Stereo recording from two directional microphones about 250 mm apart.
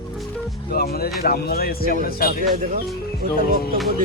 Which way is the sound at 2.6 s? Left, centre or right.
Right.